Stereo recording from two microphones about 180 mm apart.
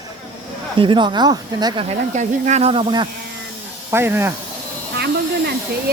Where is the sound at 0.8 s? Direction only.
25° right (ahead or behind).